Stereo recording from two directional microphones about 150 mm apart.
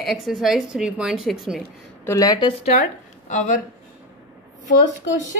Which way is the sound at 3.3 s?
60° left (ahead or behind).